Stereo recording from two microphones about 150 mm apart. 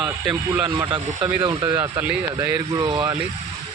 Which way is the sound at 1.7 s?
15° right (ahead or behind).